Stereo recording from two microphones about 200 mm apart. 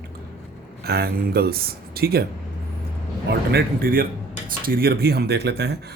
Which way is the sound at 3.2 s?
50° right (ahead or behind).